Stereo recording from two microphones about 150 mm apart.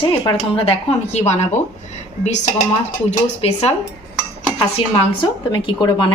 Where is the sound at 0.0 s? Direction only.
35° left (ahead or behind).